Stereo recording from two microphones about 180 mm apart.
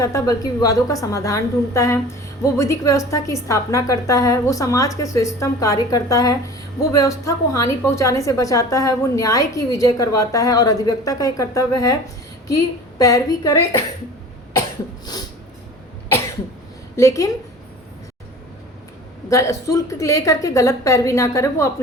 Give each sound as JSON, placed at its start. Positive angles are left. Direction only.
{"t": 0.0, "sound": "a woman's voice", "side_deg": 20}
{"t": 15.0, "sound": "a sound", "side_deg": 20}
{"t": 17.0, "sound": "a woman's voice", "side_deg": 15}
{"t": 19.3, "sound": "a woman's voice", "side_deg": 15}